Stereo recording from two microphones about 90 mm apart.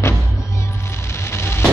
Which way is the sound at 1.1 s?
30° left (ahead or behind).